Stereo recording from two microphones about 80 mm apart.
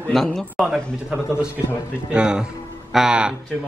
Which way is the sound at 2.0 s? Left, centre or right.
Centre.